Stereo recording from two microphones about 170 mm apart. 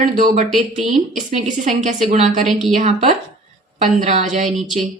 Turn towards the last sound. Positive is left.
turn(degrees=-45)  # may be behind; listen again after turning